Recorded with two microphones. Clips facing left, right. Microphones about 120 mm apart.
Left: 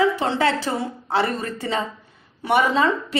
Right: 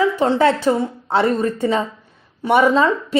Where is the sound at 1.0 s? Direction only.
25° right (ahead or behind).